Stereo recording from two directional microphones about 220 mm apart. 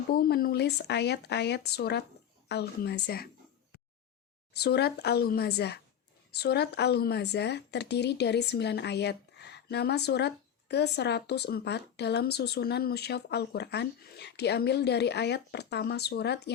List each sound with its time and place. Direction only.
0.1 s a woman's voice: 45° left (ahead or behind)
4.5 s a woman's voice: 45° left (ahead or behind)